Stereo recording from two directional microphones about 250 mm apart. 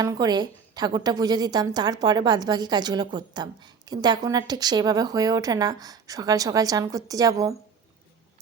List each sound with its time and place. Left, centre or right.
0.0 s a woman's voice: centre